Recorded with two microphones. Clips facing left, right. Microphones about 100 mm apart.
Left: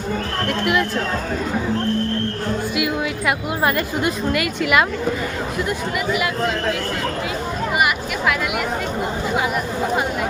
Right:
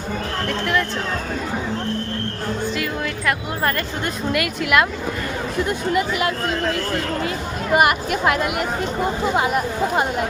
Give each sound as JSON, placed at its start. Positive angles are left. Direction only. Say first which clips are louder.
{"t": 0.6, "sound": "speech", "louder": "left 2 dB", "side_deg": 10}
{"t": 2.7, "sound": "a woman's voice", "louder": "left 3 dB", "side_deg": 10}
{"t": 5.6, "sound": "speech", "louder": "right 2 dB", "side_deg": -30}
{"t": 7.8, "sound": "speech", "louder": "right 5 dB", "side_deg": -40}